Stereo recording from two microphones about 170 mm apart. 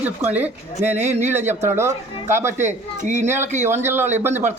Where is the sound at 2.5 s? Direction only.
45° right (ahead or behind).